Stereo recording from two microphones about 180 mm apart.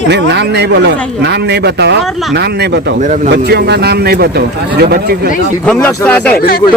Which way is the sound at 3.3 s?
65° right (ahead or behind).